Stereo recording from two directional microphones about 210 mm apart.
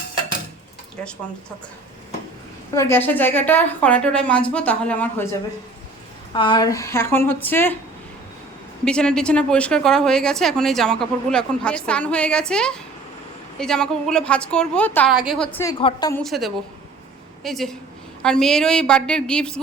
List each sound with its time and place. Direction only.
2.7 s a woman's voice: 10° left (ahead or behind)
6.3 s a woman's voice: 25° left (ahead or behind)
8.8 s a woman's voice: 5° left (ahead or behind)
15.1 s a woman's voice: 5° right (ahead or behind)
15.8 s a woman's voice: 20° left (ahead or behind)
16.2 s a woman's voice: centre (ahead or behind)